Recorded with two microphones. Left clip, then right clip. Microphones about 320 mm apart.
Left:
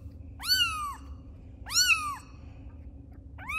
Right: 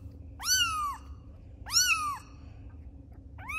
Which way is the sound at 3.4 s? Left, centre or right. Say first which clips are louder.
Left 3 dB; centre.